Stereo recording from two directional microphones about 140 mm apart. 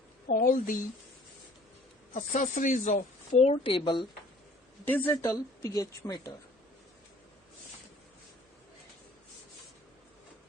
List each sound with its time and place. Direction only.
0.3 s speech: 85° left
2.1 s speech: 65° left (ahead or behind); by 4.0 s 35° left (ahead or behind)
4.9 s speech: 15° left (ahead or behind)